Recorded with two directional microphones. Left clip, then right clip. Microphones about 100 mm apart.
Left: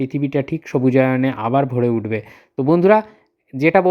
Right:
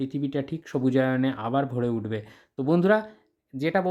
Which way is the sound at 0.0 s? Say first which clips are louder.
Left 9 dB; 35° left (ahead or behind).